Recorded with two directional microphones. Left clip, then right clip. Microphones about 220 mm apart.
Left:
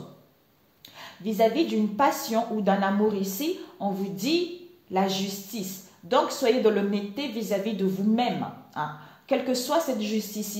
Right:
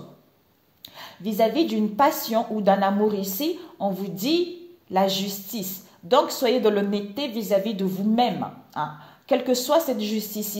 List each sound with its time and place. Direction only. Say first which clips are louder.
0.8 s a woman's voice: right 1 dB; 45° right (ahead or behind)